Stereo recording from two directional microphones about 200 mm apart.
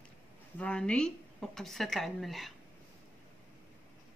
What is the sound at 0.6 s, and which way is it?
A woman's voice, 5° left (ahead or behind).